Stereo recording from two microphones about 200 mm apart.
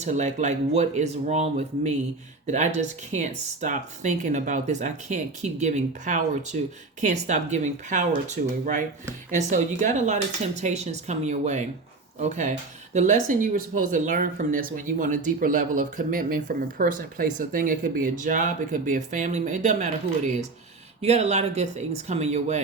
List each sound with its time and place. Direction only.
0.0 s speech: 35° right (ahead or behind)
9.3 s speech: 35° right (ahead or behind)